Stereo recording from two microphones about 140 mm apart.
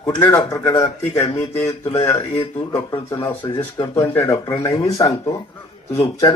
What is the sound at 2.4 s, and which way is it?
Speech, 40° left (ahead or behind).